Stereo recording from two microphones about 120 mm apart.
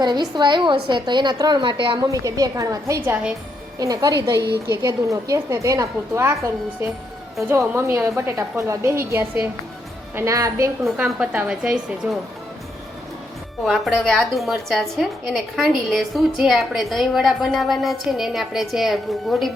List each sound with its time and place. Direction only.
0.0 s a woman's voice: 35° right (ahead or behind)
2.0 s a woman's voice: 30° right (ahead or behind)
3.8 s a woman's voice: 30° right (ahead or behind); by 9.5 s 15° right (ahead or behind)
10.2 s a woman's voice: 25° right (ahead or behind)
10.8 s a woman's voice: 5° right (ahead or behind)
13.7 s a woman's voice: 5° left (ahead or behind)